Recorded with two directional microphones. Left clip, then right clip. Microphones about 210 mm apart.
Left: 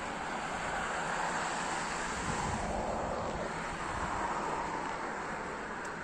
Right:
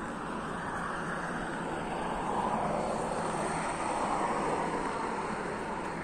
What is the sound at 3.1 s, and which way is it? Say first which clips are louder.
Vehicle: right 4 dB; 55° right (ahead or behind).